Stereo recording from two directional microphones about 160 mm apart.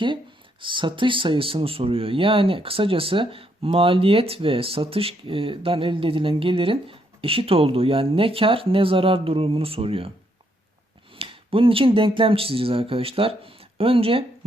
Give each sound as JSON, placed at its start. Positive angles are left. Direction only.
{"t": 0.6, "sound": "speech", "side_deg": -30}
{"t": 11.1, "sound": "speech", "side_deg": -35}